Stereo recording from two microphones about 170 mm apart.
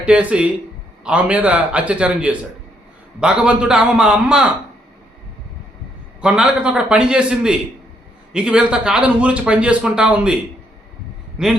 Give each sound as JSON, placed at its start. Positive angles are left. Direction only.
{"t": 0.0, "sound": "a man's voice", "side_deg": -10}
{"t": 6.2, "sound": "a man's voice", "side_deg": -5}
{"t": 11.4, "sound": "a man's voice", "side_deg": -5}